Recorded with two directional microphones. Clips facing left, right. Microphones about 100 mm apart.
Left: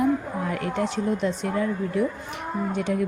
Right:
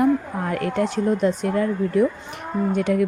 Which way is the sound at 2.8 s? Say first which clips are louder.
Right 5 dB; 60° right (ahead or behind).